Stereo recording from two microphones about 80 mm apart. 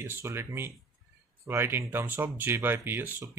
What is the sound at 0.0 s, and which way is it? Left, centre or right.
Speech, right.